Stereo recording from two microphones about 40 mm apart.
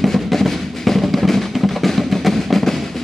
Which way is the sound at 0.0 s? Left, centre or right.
Centre.